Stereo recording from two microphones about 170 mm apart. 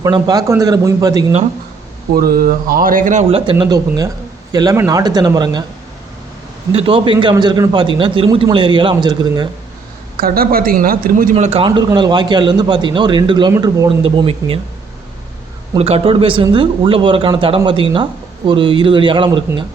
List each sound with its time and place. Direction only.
0.0 s speech: 20° right (ahead or behind)
2.1 s speech: 60° right (ahead or behind)
3.2 s speech: 35° right (ahead or behind)
6.7 s speech: 30° right (ahead or behind)
10.2 s speech: 60° right (ahead or behind); by 14.6 s 30° right (ahead or behind)
15.7 s speech: 35° right (ahead or behind)